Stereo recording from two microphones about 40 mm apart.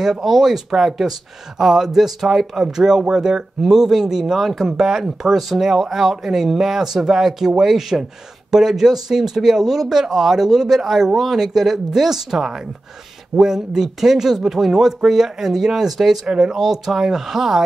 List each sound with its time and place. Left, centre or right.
0.0 s speech: centre